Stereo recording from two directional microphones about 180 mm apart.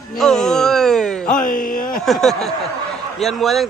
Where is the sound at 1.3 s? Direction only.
50° left (ahead or behind).